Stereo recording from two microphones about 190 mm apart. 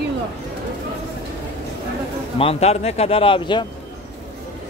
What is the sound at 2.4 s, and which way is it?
Speech, 30° left (ahead or behind).